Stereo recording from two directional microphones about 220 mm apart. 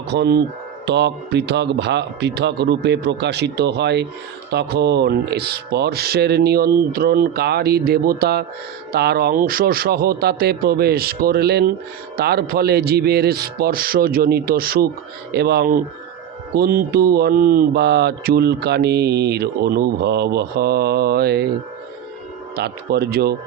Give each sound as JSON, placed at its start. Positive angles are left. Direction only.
{"t": 0.1, "sound": "speech", "side_deg": -50}
{"t": 22.5, "sound": "speech", "side_deg": -45}